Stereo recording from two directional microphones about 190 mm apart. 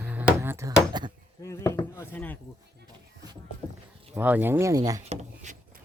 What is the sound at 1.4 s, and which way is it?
Speech, 15° left (ahead or behind).